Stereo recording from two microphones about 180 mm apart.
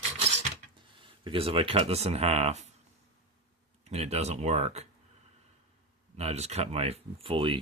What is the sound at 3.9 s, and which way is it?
Speech, 35° right (ahead or behind).